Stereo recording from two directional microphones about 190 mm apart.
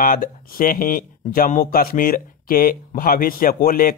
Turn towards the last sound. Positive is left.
turn(degrees=50)  # may be behind; listen again after turning